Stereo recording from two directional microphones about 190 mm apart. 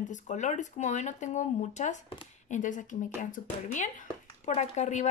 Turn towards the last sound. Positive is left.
turn(degrees=40)  # may be behind; listen again after turning